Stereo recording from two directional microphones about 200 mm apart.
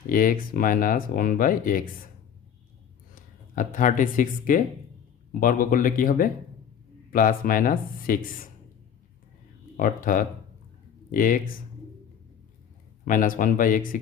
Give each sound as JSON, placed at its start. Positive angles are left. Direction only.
{"t": 0.0, "sound": "speech", "side_deg": 45}
{"t": 3.5, "sound": "speech", "side_deg": 40}
{"t": 9.8, "sound": "speech", "side_deg": 45}
{"t": 13.0, "sound": "speech", "side_deg": 40}